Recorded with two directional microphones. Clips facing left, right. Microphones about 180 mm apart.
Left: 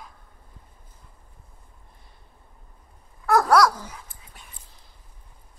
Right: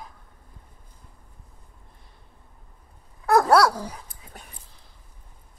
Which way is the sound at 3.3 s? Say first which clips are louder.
Right 1 dB; 25° right (ahead or behind).